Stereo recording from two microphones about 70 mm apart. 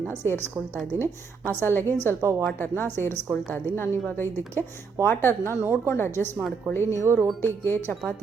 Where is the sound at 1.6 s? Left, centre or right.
Left.